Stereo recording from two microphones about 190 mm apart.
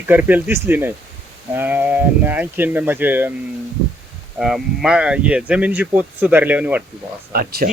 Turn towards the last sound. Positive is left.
turn(degrees=-50)  # may be behind; listen again after turning